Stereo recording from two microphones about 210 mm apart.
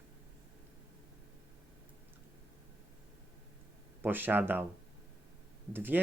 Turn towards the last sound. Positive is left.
turn(degrees=-10)  # may be behind; listen again after turning